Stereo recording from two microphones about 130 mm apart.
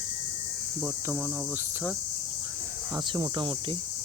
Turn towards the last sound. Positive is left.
turn(degrees=-35)  # may be behind; listen again after turning